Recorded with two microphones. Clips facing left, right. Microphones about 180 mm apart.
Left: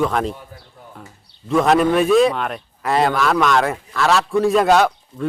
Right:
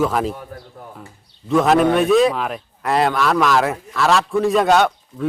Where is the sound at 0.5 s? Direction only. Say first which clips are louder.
Right 7 dB; 55° right (ahead or behind).